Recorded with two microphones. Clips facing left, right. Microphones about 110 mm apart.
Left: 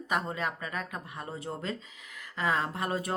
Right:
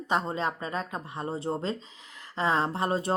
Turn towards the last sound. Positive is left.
turn(degrees=-30)  # may be behind; listen again after turning